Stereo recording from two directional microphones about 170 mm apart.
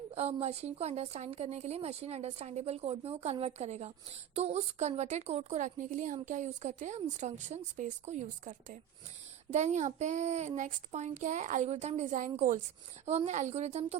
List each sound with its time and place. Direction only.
0.1 s a woman's voice: 40° right (ahead or behind)